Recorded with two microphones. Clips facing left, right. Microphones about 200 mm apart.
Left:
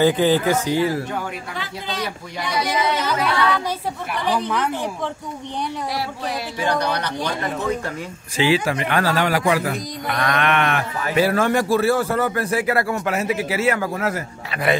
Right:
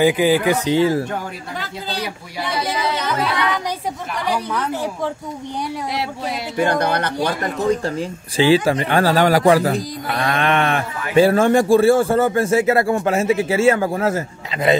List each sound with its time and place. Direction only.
0.0 s speech: 10° right (ahead or behind)
0.7 s speech: 25° right (ahead or behind)
6.5 s speech: 50° right (ahead or behind)
7.5 s speech: 30° right (ahead or behind)